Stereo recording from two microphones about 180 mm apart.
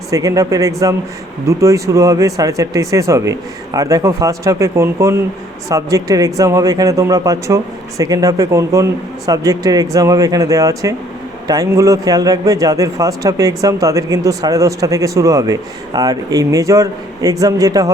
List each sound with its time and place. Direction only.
0.1 s a man's voice: 20° right (ahead or behind)